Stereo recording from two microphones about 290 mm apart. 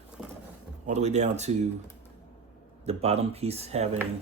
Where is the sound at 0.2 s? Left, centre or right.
Centre.